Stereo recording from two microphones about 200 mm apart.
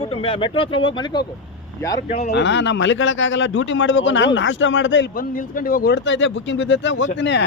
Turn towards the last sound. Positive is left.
turn(degrees=60)  # may be behind; listen again after turning